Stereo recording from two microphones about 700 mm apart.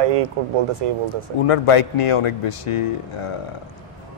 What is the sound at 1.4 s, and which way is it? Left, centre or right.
A man's voice, left.